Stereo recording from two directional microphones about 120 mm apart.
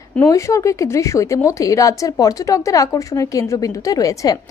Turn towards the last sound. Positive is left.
turn(degrees=30)  # may be behind; listen again after turning